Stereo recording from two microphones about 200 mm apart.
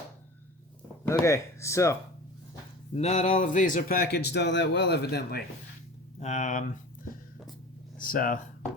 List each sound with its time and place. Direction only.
1.0 s speech: 15° left (ahead or behind)
2.9 s speech: 35° left (ahead or behind); by 5.4 s 55° left (ahead or behind)
6.1 s speech: 35° left (ahead or behind)
7.9 s speech: 45° left (ahead or behind)